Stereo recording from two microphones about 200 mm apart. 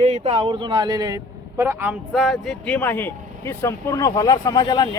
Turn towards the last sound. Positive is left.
turn(degrees=20)  # may be behind; listen again after turning